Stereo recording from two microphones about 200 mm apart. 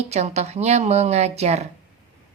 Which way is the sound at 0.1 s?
35° right (ahead or behind).